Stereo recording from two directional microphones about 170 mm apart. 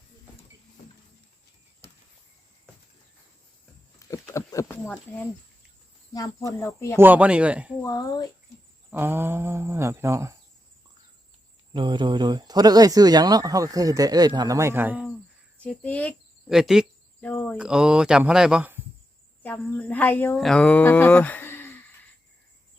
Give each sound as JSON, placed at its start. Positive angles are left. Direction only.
{"t": 4.1, "sound": "patter", "side_deg": 20}
{"t": 6.1, "sound": "speech", "side_deg": 20}
{"t": 6.9, "sound": "speech", "side_deg": -10}
{"t": 7.8, "sound": "patter", "side_deg": 20}
{"t": 8.9, "sound": "speech", "side_deg": -10}
{"t": 11.7, "sound": "speech", "side_deg": -30}
{"t": 15.5, "sound": "speech", "side_deg": 10}
{"t": 16.5, "sound": "speech", "side_deg": -5}
{"t": 17.2, "sound": "cricket", "side_deg": 10}
{"t": 17.6, "sound": "speech", "side_deg": -5}
{"t": 19.4, "sound": "a woman's voice", "side_deg": 10}